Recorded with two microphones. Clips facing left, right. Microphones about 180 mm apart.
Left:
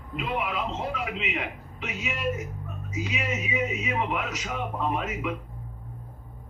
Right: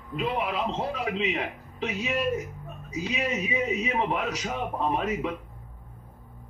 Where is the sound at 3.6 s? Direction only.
35° right (ahead or behind).